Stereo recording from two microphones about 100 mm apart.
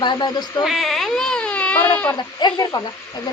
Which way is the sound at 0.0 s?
50° left (ahead or behind).